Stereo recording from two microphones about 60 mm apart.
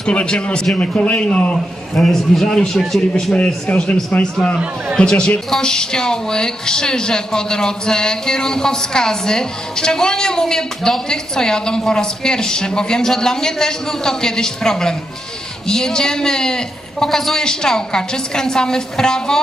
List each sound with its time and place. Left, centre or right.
0.0 s a man's voice: centre
1.5 s a man's voice: centre
3.3 s a man's voice: left